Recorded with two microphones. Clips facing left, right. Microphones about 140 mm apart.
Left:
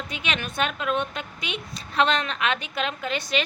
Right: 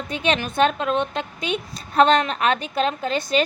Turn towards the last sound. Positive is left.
turn(degrees=-35)  # may be behind; listen again after turning